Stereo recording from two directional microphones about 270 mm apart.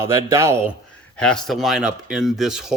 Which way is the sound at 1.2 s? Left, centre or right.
Centre.